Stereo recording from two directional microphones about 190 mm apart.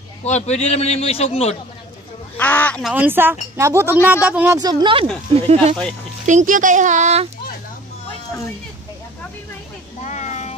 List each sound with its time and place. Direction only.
0.2 s a man's voice: 35° left (ahead or behind)
2.3 s speech: 10° left (ahead or behind)
2.9 s speech: 10° right (ahead or behind)
4.6 s speech: 20° right (ahead or behind)
5.3 s speech: 35° right (ahead or behind)
10.0 s vehicle: 40° left (ahead or behind)